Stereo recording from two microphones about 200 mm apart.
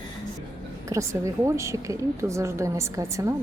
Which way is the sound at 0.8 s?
15° right (ahead or behind).